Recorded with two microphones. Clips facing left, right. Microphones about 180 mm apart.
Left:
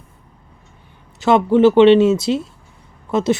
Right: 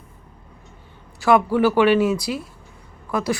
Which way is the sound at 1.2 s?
20° left (ahead or behind).